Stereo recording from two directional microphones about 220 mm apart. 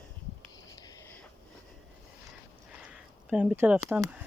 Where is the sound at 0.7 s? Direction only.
15° left (ahead or behind).